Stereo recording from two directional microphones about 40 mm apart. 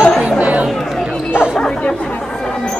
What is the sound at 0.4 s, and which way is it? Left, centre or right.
Chatter, right.